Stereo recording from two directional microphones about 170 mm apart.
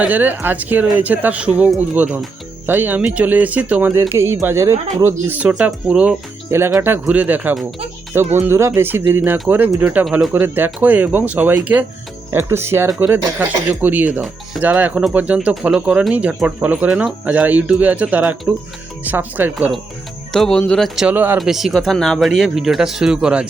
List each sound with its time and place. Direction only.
0.0 s speech: 10° right (ahead or behind)
6.5 s speech: 15° right (ahead or behind)
20.3 s speech: 5° left (ahead or behind)